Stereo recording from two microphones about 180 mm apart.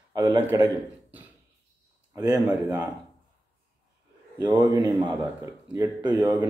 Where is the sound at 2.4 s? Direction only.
20° right (ahead or behind).